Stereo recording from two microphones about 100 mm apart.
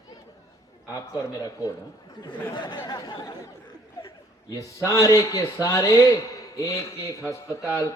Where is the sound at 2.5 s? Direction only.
50° left (ahead or behind).